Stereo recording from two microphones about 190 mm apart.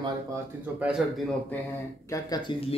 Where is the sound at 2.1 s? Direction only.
20° left (ahead or behind).